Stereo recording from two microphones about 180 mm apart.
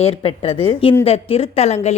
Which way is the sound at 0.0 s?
35° left (ahead or behind).